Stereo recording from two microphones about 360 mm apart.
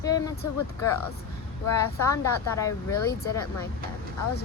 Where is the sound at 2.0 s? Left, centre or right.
Centre.